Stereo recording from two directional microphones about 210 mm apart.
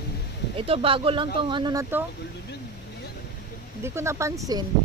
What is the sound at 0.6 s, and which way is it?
Speech, 25° right (ahead or behind).